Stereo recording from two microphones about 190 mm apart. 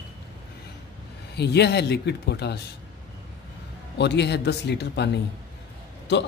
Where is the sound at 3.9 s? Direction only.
65° left (ahead or behind).